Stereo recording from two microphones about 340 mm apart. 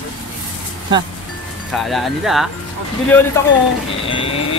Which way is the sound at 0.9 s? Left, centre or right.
Centre.